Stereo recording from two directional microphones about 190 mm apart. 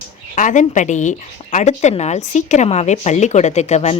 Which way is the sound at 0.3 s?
40° left (ahead or behind).